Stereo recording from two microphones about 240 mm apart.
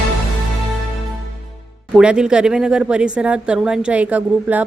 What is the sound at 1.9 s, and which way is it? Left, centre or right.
A woman's voice, centre.